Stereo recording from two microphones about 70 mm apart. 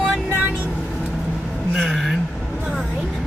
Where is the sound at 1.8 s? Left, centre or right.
Centre.